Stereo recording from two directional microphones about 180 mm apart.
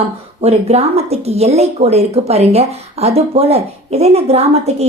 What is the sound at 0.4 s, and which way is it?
Speech, 35° right (ahead or behind).